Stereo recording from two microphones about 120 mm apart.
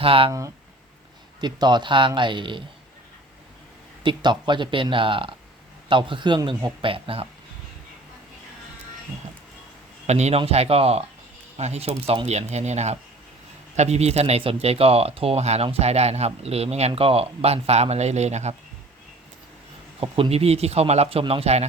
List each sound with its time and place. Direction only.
0.0 s speech: 50° right (ahead or behind)
0.3 s speech: 25° right (ahead or behind); by 2.6 s 45° right (ahead or behind)
4.0 s speech: 40° right (ahead or behind)
10.1 s speech: 65° right (ahead or behind)
20.0 s speech: 50° right (ahead or behind)